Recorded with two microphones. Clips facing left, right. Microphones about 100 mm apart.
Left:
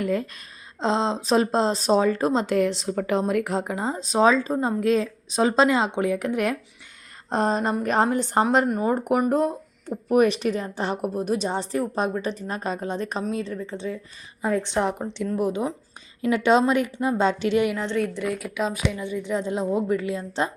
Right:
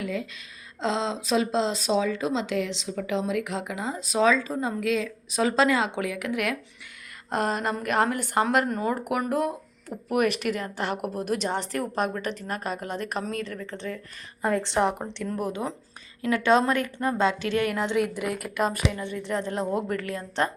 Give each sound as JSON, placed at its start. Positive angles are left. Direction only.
{"t": 0.0, "sound": "a sound", "side_deg": 50}
{"t": 0.8, "sound": "a woman's voice", "side_deg": 30}
{"t": 14.4, "sound": "a woman's voice", "side_deg": 0}
{"t": 16.2, "sound": "a woman's voice", "side_deg": 20}
{"t": 17.2, "sound": "a woman's voice", "side_deg": 25}
{"t": 17.8, "sound": "a woman's voice", "side_deg": -5}